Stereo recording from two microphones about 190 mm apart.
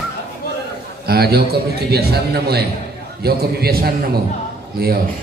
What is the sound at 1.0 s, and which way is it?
A man's voice, 55° right (ahead or behind).